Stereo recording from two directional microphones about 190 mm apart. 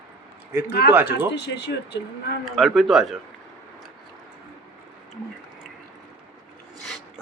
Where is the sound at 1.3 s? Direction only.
60° left (ahead or behind).